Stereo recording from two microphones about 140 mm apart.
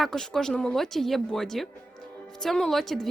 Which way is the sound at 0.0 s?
5° left (ahead or behind).